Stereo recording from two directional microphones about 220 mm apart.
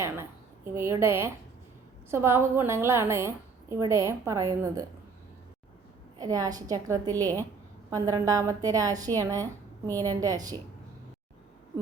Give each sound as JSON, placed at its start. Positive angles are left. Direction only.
{"t": 0.0, "sound": "a sound", "side_deg": -10}
{"t": 2.0, "sound": "a woman's voice", "side_deg": -10}
{"t": 6.1, "sound": "a woman's voice", "side_deg": -15}